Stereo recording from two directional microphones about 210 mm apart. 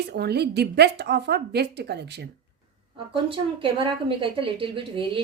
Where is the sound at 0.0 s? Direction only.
50° right (ahead or behind).